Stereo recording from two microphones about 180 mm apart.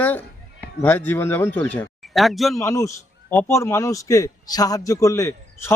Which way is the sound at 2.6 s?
15° left (ahead or behind).